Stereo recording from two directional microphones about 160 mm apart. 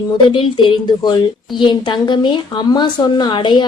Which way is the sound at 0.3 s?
30° left (ahead or behind).